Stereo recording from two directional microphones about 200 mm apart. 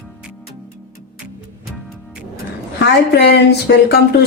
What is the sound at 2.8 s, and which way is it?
Speech, 55° left (ahead or behind).